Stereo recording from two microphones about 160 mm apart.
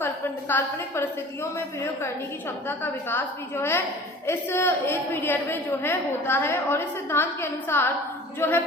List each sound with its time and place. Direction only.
0.0 s a woman's voice: 15° left (ahead or behind)